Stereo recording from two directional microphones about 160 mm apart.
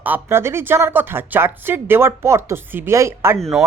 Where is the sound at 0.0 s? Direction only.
15° right (ahead or behind).